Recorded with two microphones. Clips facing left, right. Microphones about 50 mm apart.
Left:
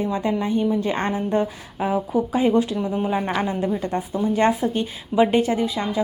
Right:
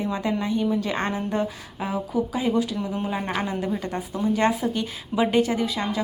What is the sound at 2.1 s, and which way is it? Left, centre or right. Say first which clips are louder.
Speech: left 4 dB; left.